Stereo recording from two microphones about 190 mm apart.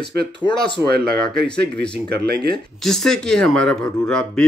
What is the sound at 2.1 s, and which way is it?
Speech, 55° right (ahead or behind).